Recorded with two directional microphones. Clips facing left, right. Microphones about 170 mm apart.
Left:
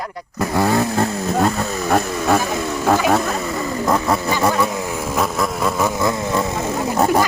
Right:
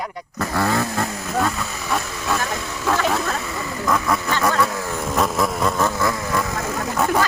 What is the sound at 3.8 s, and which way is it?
Speech, 30° left (ahead or behind).